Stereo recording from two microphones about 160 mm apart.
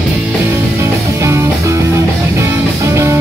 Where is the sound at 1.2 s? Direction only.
15° right (ahead or behind).